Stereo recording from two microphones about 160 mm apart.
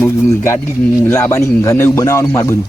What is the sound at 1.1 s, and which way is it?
Speech, 15° left (ahead or behind).